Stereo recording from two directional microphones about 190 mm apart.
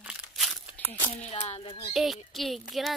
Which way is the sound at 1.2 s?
35° left (ahead or behind).